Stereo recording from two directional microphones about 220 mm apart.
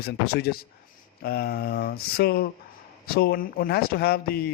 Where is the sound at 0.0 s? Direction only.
45° left (ahead or behind).